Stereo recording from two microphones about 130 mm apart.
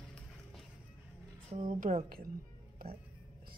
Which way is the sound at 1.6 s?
90° right.